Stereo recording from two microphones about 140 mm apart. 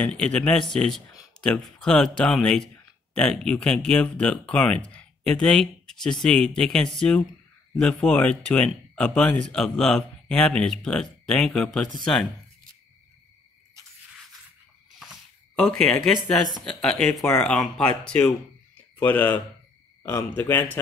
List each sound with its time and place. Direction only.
0.0 s speech: 10° left (ahead or behind)
15.0 s a sound: 5° left (ahead or behind)
17.1 s speech: 20° left (ahead or behind)
17.4 s speech: 5° left (ahead or behind)